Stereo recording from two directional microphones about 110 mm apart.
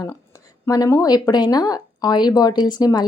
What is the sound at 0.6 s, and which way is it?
Speech, 30° left (ahead or behind).